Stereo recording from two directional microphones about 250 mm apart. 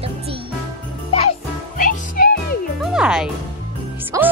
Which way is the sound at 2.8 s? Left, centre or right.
Centre.